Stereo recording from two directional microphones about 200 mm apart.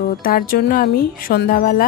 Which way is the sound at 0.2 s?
45° left (ahead or behind).